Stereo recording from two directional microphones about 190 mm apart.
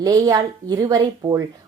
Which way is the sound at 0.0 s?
20° right (ahead or behind).